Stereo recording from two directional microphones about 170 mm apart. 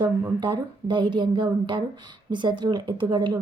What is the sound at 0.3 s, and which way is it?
Speech, 30° right (ahead or behind).